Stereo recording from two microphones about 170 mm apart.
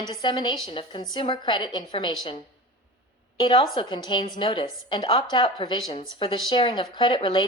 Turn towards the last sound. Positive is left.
turn(degrees=30)  # may be behind; listen again after turning